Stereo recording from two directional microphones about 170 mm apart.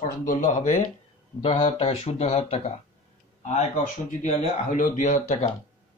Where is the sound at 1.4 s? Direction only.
35° left (ahead or behind).